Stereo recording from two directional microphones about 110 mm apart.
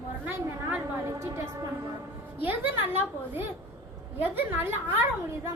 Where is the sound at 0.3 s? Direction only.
20° right (ahead or behind).